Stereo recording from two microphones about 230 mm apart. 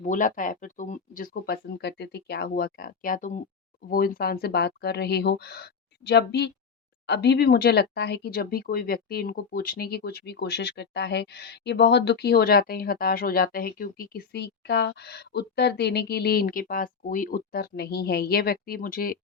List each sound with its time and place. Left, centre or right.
0.0 s speech: left